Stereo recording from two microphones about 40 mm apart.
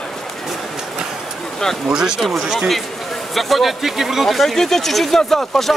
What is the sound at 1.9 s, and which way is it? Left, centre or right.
Speech, centre.